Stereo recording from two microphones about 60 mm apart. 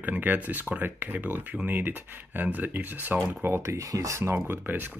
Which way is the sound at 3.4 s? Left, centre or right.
Right.